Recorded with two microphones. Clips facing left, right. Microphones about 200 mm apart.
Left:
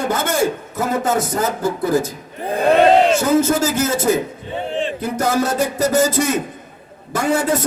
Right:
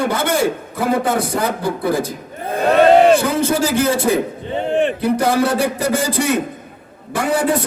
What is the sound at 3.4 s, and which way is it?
A man's voice, 45° left (ahead or behind).